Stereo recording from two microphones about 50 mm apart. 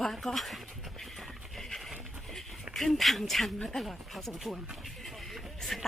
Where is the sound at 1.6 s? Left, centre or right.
Centre.